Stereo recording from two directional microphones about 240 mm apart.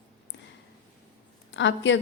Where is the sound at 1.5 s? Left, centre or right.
Left.